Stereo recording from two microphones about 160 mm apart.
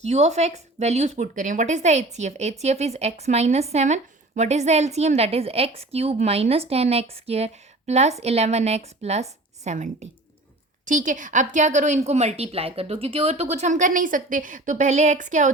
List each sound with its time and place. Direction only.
0.0 s speech: 45° right (ahead or behind)